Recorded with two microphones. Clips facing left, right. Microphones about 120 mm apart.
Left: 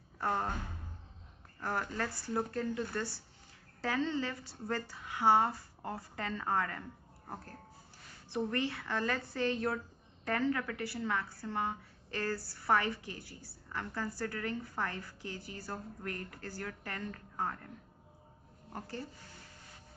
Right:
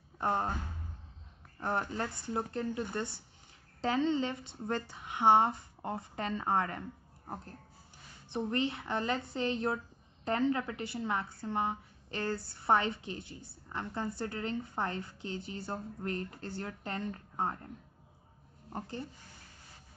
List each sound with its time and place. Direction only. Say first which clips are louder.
0.2 s a woman's voice: right 2 dB; 20° right (ahead or behind)
1.6 s a woman's voice: right 2 dB; 20° right (ahead or behind)
8.3 s a woman's voice: right 2 dB; 20° right (ahead or behind)
18.7 s a woman's voice: right 2 dB; 20° right (ahead or behind)